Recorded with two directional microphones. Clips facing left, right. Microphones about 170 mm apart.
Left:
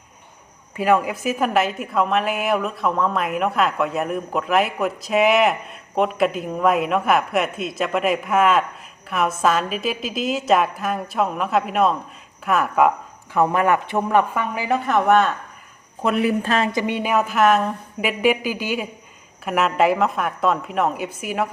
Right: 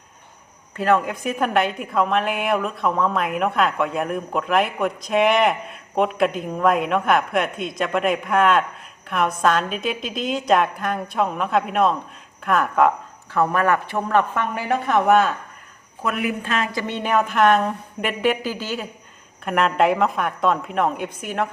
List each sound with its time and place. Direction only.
0.8 s a woman's voice: 10° left (ahead or behind)
13.3 s a woman's voice: 20° left (ahead or behind); by 15.4 s centre (ahead or behind)
16.0 s speech: 30° left (ahead or behind)
16.7 s a woman's voice: 10° left (ahead or behind)